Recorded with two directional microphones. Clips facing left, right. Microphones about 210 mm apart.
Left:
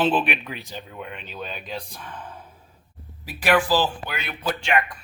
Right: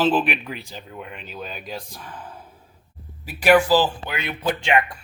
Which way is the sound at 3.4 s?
10° right (ahead or behind).